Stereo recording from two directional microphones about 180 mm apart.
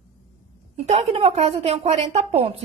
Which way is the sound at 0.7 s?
35° right (ahead or behind).